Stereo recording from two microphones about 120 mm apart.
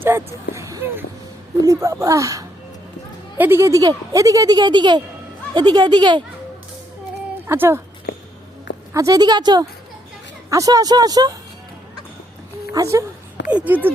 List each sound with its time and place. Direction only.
0.0 s speech: 20° right (ahead or behind); by 6.2 s 40° right (ahead or behind)
7.4 s speech: 20° right (ahead or behind)
8.9 s speech: 30° right (ahead or behind)
12.7 s speech: 30° right (ahead or behind)
13.5 s speech: 10° right (ahead or behind)